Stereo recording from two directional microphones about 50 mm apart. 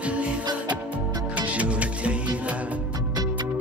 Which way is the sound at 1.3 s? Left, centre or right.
Right.